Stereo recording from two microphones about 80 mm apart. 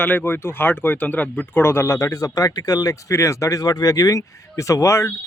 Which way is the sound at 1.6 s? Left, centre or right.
Left.